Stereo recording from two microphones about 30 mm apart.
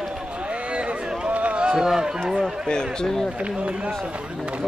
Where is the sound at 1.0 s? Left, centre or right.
Right.